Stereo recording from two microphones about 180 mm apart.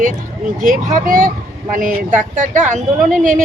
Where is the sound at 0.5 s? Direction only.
50° right (ahead or behind).